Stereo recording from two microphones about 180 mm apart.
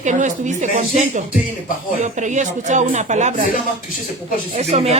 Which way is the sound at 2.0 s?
45° right (ahead or behind).